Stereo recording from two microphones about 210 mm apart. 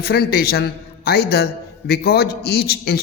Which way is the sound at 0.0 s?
50° left (ahead or behind).